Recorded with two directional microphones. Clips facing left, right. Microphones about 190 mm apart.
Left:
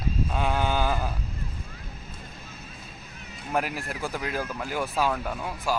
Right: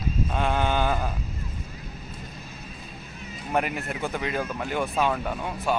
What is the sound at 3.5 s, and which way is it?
Speech, centre (ahead or behind).